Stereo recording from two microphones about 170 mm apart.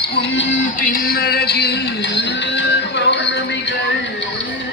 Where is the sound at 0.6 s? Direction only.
55° left (ahead or behind); by 3.7 s 90° left.